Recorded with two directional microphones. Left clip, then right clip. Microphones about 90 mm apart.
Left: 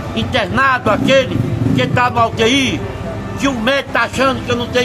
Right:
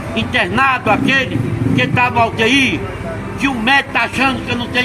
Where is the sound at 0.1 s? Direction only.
35° left (ahead or behind).